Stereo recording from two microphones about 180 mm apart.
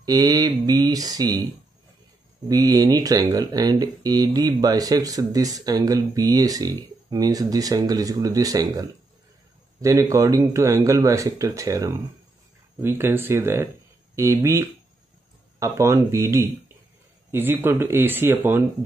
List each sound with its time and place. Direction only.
0.0 s speech: 20° right (ahead or behind)
2.4 s speech: 20° right (ahead or behind)